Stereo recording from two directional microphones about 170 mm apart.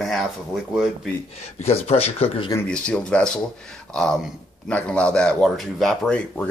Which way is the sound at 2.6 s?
5° left (ahead or behind).